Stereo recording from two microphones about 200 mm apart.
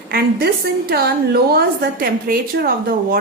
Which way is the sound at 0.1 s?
50° right (ahead or behind).